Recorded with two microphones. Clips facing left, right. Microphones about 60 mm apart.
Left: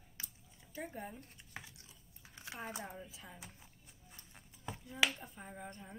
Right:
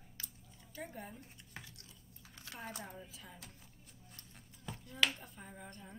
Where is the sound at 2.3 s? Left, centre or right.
Centre.